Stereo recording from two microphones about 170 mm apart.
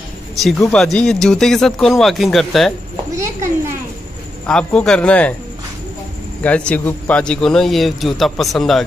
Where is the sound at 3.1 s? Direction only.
20° right (ahead or behind).